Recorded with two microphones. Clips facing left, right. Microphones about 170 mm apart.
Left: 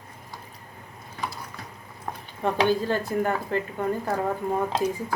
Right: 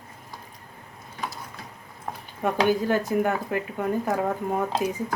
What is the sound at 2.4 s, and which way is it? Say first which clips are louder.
Speech: even; 10° right (ahead or behind).